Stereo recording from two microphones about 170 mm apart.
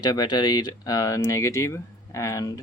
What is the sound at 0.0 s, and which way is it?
Speech, 25° left (ahead or behind).